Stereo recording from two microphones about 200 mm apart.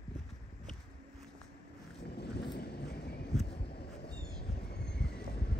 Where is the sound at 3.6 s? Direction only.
55° left (ahead or behind).